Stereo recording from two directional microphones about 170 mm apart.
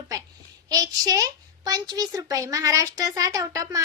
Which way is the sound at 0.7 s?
20° right (ahead or behind).